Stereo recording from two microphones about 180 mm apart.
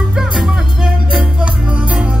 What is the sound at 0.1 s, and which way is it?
Music, centre (ahead or behind).